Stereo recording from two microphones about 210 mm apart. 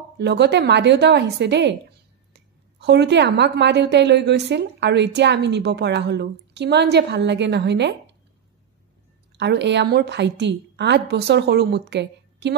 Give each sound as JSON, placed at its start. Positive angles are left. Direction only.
{"t": 0.2, "sound": "a woman's voice", "side_deg": -55}
{"t": 9.4, "sound": "a woman's voice", "side_deg": -55}